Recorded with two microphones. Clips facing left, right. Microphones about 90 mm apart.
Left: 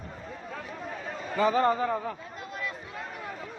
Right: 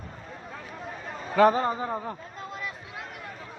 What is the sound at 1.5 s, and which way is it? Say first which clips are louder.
Speech: left 3 dB; 20° right (ahead or behind).